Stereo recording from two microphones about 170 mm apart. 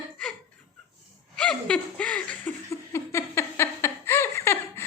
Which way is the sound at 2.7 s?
15° left (ahead or behind).